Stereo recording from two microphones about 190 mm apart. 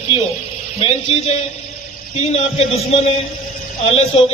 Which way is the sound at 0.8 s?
30° left (ahead or behind).